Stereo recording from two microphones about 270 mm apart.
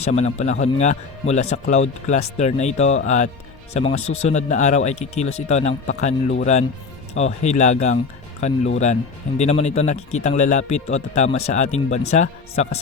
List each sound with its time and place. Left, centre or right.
0.0 s speech: left